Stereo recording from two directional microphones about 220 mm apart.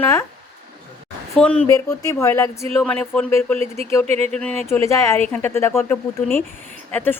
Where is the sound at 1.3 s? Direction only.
5° left (ahead or behind).